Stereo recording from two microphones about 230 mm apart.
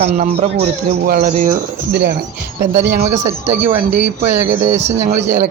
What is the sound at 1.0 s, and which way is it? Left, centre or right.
Speech, right.